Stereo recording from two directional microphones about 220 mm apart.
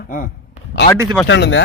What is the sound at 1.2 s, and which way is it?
Speech, 55° left (ahead or behind).